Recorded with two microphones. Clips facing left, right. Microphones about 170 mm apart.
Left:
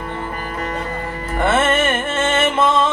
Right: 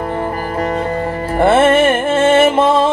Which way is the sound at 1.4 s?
30° right (ahead or behind).